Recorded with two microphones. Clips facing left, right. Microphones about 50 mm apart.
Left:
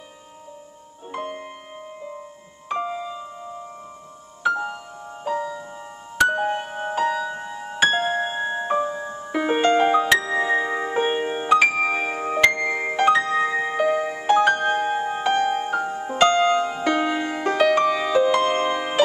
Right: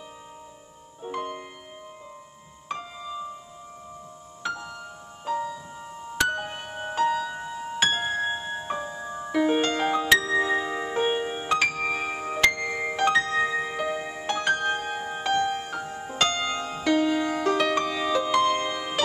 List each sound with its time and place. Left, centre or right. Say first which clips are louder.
1.1 s music: left 2 dB; centre
4.5 s music: left 10 dB; left
5.2 s music: left 3 dB; centre; by 11.4 s left
11.4 s music: left 8 dB; centre; by 14.2 s left
14.2 s music: left 7 dB; centre; by 17.6 s left
17.6 s music: left 6 dB; centre